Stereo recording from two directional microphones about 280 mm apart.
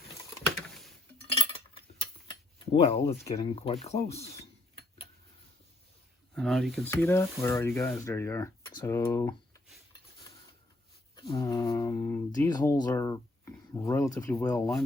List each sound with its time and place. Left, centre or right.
1.3 s a sound: centre
2.6 s speech: left
6.3 s speech: centre
11.1 s speech: centre